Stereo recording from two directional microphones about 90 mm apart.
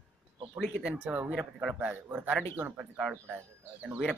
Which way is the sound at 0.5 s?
10° right (ahead or behind).